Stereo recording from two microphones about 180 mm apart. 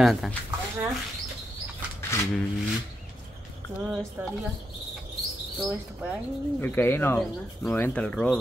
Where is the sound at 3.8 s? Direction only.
5° right (ahead or behind).